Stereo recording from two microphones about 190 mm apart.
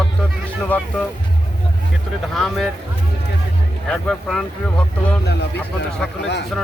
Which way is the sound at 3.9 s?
Centre (ahead or behind).